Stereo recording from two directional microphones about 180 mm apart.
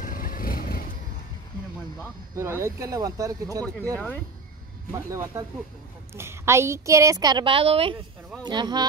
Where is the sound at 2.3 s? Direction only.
15° right (ahead or behind).